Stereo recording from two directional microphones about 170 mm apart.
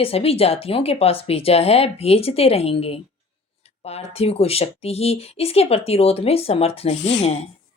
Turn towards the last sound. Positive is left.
turn(degrees=40)  # may be behind; listen again after turning